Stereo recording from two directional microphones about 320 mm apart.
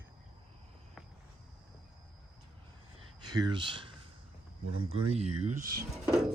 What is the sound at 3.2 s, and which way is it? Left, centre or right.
Speech, centre.